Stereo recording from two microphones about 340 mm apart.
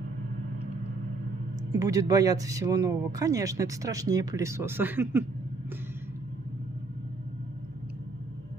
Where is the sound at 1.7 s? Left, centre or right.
Centre.